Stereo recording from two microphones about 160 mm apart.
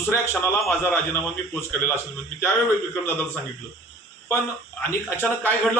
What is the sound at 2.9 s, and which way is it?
Speech, 10° left (ahead or behind).